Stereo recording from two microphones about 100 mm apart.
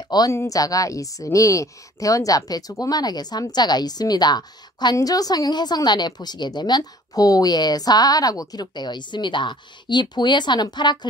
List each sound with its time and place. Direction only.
0.3 s a woman's voice: 30° left (ahead or behind); by 11.1 s 45° left (ahead or behind)